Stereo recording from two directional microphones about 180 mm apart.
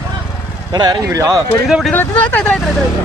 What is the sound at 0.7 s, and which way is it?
Speech, 25° right (ahead or behind).